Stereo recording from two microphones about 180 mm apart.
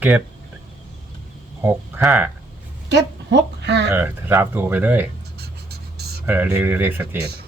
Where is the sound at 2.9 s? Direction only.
70° right (ahead or behind).